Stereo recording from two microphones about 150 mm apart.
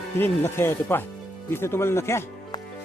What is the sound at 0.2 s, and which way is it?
Speech, 15° left (ahead or behind).